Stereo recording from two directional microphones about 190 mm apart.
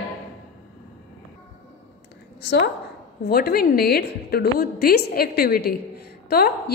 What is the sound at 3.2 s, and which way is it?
A woman's voice, 55° left (ahead or behind).